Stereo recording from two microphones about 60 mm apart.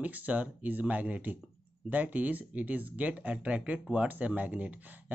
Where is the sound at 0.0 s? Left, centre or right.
Right.